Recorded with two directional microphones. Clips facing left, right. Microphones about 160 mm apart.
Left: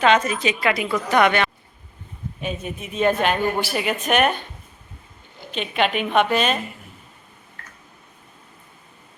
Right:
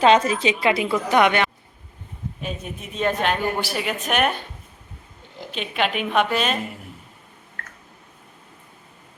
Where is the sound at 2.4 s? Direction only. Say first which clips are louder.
Left 4 dB; centre (ahead or behind).